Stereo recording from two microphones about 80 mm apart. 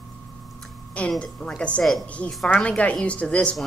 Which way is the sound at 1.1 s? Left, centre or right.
Centre.